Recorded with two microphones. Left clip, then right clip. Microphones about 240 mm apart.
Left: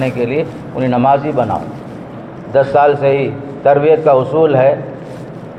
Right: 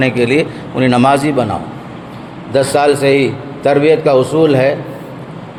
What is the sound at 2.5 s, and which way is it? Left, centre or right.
A man's voice, right.